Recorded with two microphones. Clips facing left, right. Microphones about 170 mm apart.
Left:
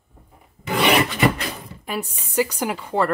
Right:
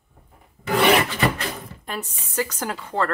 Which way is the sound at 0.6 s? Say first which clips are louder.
Right 1 dB; 15° left (ahead or behind).